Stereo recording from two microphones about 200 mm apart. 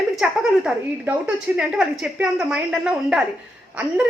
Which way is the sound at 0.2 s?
5° right (ahead or behind).